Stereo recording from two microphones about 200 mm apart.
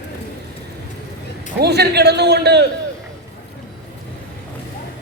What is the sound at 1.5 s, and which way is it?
A man's voice, 55° right (ahead or behind).